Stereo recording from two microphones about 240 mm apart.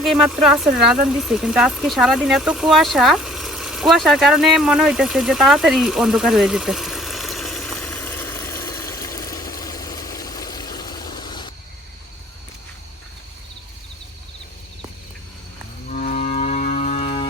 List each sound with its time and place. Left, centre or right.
0.0 s speech: centre
1.0 s a sound: centre
15.9 s music: left